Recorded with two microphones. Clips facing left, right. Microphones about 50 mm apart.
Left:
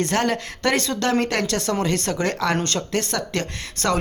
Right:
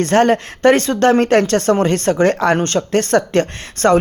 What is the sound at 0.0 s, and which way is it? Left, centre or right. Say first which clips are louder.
Speech: right 9 dB; right.